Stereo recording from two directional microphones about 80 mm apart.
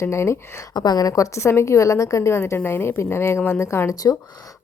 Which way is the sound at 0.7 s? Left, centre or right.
Left.